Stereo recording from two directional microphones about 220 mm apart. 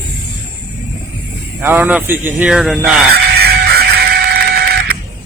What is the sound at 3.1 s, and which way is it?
Music, 45° right (ahead or behind).